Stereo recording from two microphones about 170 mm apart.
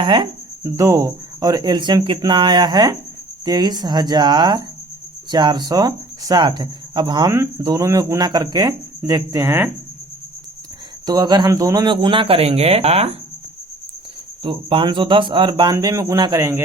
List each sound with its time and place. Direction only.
0.0 s speech: 30° right (ahead or behind)
11.0 s speech: 25° right (ahead or behind)
14.4 s speech: 30° right (ahead or behind)